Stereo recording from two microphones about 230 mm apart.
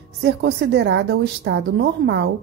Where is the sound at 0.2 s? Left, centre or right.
Right.